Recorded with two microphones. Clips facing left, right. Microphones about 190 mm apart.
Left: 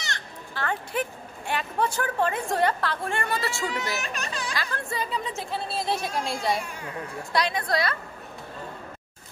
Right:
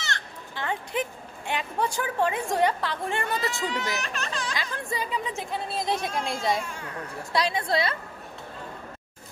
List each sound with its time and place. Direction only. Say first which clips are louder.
0.6 s a woman's voice: left 1 dB; 20° right (ahead or behind)
4.0 s speech: even; 15° left (ahead or behind)
4.6 s a woman's voice: left 1 dB; 15° right (ahead or behind)